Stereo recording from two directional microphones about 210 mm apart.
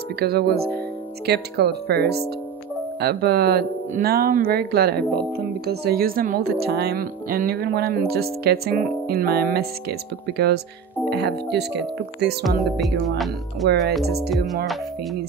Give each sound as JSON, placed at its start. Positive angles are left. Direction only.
{"t": 0.2, "sound": "speech", "side_deg": -50}
{"t": 14.3, "sound": "speech", "side_deg": 0}